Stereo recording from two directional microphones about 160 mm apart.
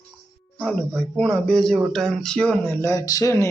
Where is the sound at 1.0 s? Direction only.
5° left (ahead or behind).